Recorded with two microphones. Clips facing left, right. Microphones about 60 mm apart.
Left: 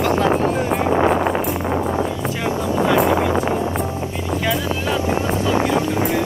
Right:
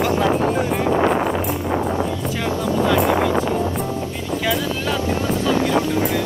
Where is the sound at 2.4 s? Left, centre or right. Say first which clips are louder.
Even; centre.